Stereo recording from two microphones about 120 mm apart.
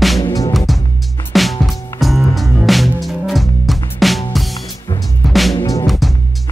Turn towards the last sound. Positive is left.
turn(degrees=0)  # may be behind; listen again after turning